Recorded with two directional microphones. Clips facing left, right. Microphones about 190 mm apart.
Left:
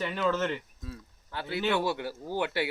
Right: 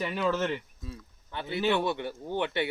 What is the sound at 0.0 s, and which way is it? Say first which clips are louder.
Speech: even; 5° right (ahead or behind).